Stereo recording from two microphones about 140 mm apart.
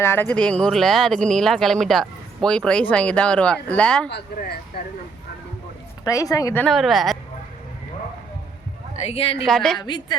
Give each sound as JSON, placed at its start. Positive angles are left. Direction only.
{"t": 0.0, "sound": "speech", "side_deg": 15}
{"t": 6.1, "sound": "speech", "side_deg": 25}
{"t": 6.6, "sound": "speech", "side_deg": 0}
{"t": 9.0, "sound": "speech", "side_deg": 45}
{"t": 9.5, "sound": "speech", "side_deg": 5}
{"t": 9.7, "sound": "a woman's voice", "side_deg": 35}